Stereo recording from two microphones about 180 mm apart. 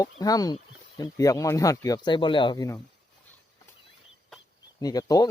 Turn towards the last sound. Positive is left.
turn(degrees=20)  # may be behind; listen again after turning